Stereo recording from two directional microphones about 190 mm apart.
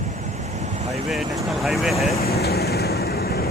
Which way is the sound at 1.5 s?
Centre (ahead or behind).